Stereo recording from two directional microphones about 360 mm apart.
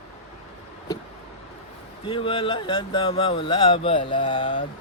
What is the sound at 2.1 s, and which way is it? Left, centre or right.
Speech, centre.